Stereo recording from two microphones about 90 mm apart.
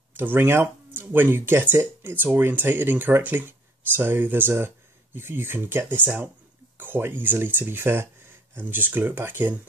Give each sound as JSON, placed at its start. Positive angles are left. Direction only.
{"t": 0.2, "sound": "speech", "side_deg": -20}